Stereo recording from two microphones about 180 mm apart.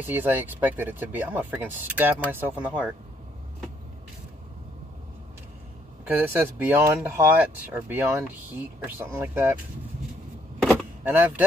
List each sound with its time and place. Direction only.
0.0 s speech: 10° right (ahead or behind)
6.0 s speech: 10° right (ahead or behind)
10.6 s power windows: centre (ahead or behind)
11.1 s speech: 10° right (ahead or behind)